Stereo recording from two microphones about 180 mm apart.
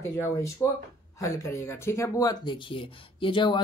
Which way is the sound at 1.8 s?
15° left (ahead or behind).